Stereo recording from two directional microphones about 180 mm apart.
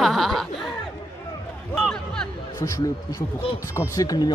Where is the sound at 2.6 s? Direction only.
20° left (ahead or behind).